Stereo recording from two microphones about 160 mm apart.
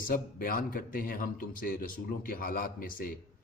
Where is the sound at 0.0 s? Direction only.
65° left (ahead or behind).